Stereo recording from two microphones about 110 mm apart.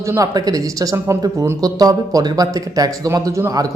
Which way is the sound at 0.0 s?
30° right (ahead or behind).